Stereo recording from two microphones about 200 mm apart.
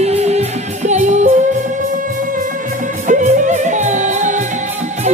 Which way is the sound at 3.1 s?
35° right (ahead or behind).